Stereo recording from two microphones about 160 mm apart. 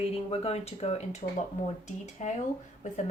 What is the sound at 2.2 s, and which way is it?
Speech, 45° left (ahead or behind).